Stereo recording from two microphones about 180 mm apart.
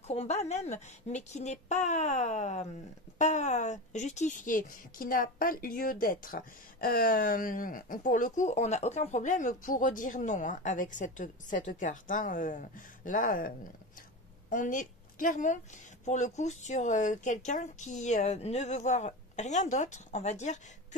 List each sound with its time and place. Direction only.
0.0 s a woman's voice: 35° left (ahead or behind)